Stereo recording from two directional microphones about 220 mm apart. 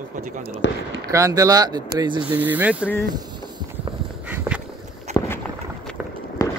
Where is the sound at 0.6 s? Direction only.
50° left (ahead or behind).